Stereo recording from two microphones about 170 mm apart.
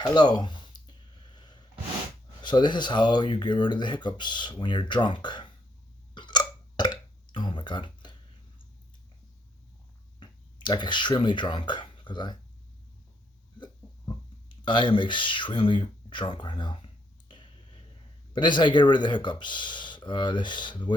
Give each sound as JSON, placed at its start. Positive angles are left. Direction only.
{"t": 0.0, "sound": "a sound", "side_deg": 25}
{"t": 2.4, "sound": "speech", "side_deg": 25}
{"t": 6.1, "sound": "burping", "side_deg": 25}
{"t": 10.2, "sound": "speech", "side_deg": 25}
{"t": 14.5, "sound": "a sound", "side_deg": 25}
{"t": 18.3, "sound": "speech", "side_deg": 25}